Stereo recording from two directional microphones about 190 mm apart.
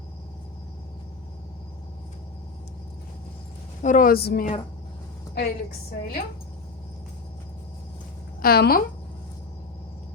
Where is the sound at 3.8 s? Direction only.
45° left (ahead or behind).